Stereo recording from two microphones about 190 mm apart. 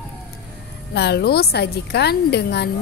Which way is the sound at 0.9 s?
60° left (ahead or behind).